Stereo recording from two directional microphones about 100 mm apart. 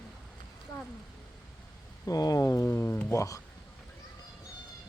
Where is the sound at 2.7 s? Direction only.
20° left (ahead or behind).